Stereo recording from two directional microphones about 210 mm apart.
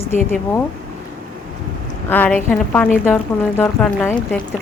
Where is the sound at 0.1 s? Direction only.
30° right (ahead or behind).